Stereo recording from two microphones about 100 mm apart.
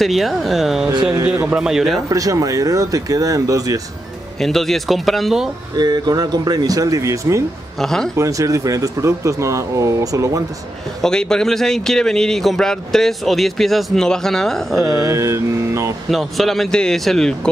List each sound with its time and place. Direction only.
0.0 s a man's voice: centre (ahead or behind)
1.2 s a man's voice: 25° right (ahead or behind)
1.5 s a man's voice: 5° right (ahead or behind)
2.0 s speech: 35° right (ahead or behind)
4.4 s a man's voice: 5° left (ahead or behind)
5.8 s speech: 45° right (ahead or behind)
7.8 s a man's voice: 5° left (ahead or behind)
8.2 s speech: 35° right (ahead or behind)
11.0 s a man's voice: 5° left (ahead or behind)
15.0 s speech: 30° right (ahead or behind)
16.1 s a man's voice: centre (ahead or behind)